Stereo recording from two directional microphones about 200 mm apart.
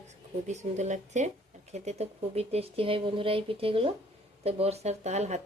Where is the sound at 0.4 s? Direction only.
35° right (ahead or behind).